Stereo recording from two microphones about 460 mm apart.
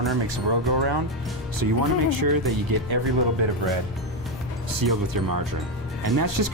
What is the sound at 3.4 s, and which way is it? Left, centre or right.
Speech, right.